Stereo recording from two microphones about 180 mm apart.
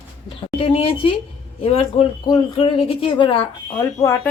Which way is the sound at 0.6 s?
30° left (ahead or behind).